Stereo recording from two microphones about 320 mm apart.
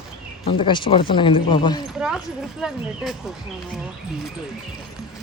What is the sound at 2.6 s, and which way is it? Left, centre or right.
Speech, centre.